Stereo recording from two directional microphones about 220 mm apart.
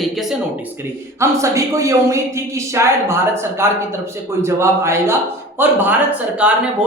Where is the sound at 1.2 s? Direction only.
15° right (ahead or behind).